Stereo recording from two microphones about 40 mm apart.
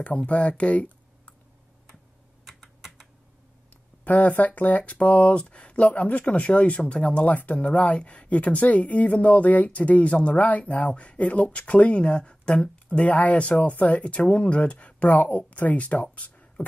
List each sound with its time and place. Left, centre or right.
0.3 s speech: left
2.4 s typing: centre
3.7 s speech: left
12.7 s speech: left